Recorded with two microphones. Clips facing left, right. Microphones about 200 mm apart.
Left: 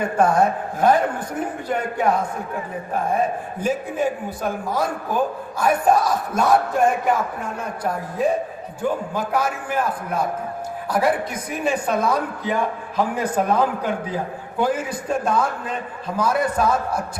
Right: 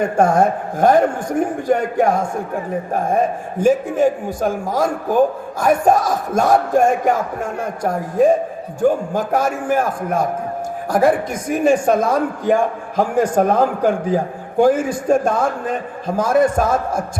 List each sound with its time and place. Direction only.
0.0 s a man's voice: 45° right (ahead or behind)